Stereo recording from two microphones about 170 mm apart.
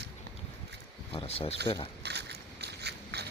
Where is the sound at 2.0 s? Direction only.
80° right.